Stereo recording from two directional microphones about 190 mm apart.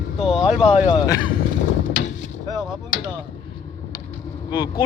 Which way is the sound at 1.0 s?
20° left (ahead or behind).